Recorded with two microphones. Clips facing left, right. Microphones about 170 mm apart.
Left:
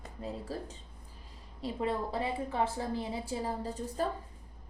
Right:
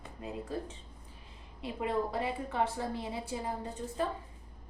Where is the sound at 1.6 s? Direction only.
30° left (ahead or behind).